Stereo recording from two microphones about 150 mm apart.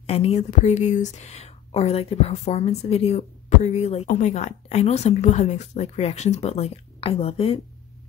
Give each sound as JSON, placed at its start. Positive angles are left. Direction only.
{"t": 0.0, "sound": "speech", "side_deg": 45}